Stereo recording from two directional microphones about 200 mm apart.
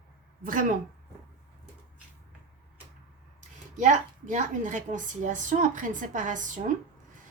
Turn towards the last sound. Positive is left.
turn(degrees=-40)  # may be behind; listen again after turning